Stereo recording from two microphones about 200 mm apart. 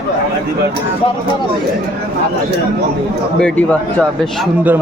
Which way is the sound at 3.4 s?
5° left (ahead or behind).